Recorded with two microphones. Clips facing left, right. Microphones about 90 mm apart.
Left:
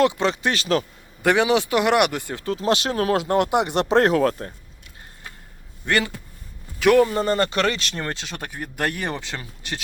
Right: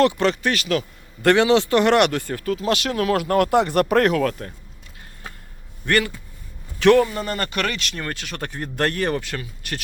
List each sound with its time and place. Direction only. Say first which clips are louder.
0.0 s speech: right 1 dB; 15° left (ahead or behind)
0.5 s a man's voice: left 1 dB; 30° left (ahead or behind)
1.2 s speech: right 3 dB; 15° left (ahead or behind); by 4.5 s 30° left (ahead or behind)
5.8 s a man's voice: right 2 dB; 20° left (ahead or behind)
7.1 s speech: left 5 dB; 30° left (ahead or behind)
8.4 s speech: right 5 dB; 5° left (ahead or behind)